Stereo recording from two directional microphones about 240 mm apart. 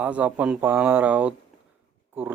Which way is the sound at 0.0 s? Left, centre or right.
Centre.